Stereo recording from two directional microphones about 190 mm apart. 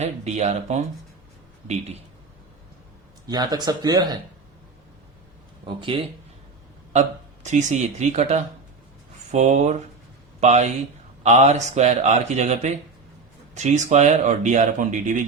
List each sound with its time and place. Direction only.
0.0 s speech: 35° right (ahead or behind)
3.2 s speech: 20° right (ahead or behind)
5.6 s speech: 30° right (ahead or behind)
7.4 s speech: 40° right (ahead or behind)